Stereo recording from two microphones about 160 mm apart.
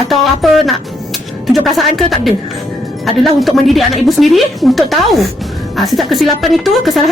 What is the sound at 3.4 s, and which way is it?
A woman's voice, centre (ahead or behind).